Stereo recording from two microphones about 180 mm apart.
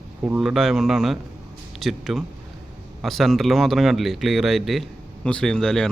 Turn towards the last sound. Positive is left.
turn(degrees=5)  # may be behind; listen again after turning